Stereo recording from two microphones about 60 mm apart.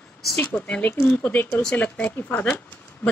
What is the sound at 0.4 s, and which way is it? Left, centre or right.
Speech, left.